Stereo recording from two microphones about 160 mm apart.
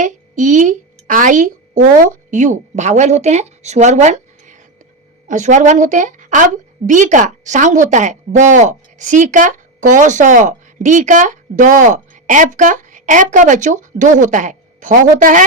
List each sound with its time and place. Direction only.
0.0 s a woman's voice: 50° right (ahead or behind)